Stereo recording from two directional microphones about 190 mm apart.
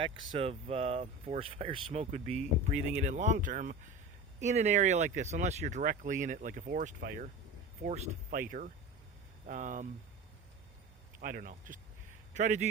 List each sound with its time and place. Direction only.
0.0 s speech: 30° right (ahead or behind)
11.2 s a man's voice: 45° right (ahead or behind)